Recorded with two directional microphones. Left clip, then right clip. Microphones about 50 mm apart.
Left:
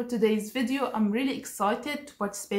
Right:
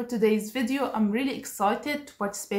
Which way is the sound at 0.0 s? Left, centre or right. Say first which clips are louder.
Right 1 dB; right.